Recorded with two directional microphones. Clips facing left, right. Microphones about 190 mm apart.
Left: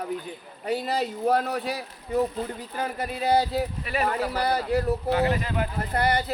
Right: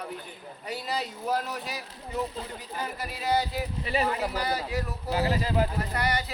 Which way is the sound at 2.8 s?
55° left (ahead or behind).